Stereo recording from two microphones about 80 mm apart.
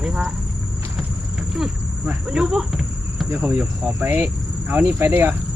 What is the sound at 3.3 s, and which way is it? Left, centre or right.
Cricket, right.